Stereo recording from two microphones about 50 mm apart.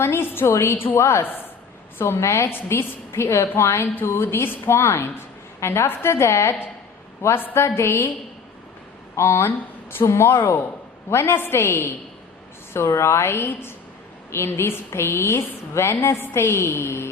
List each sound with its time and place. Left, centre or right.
0.0 s a woman's voice: left
0.9 s a woman's voice: left
3.6 s a woman's voice: left
3.9 s a woman's voice: left
4.7 s a woman's voice: left
9.1 s a woman's voice: left
12.9 s a woman's voice: left
16.0 s a woman's voice: left
16.5 s a woman's voice: left